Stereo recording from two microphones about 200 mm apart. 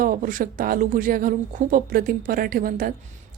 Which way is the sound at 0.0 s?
40° right (ahead or behind).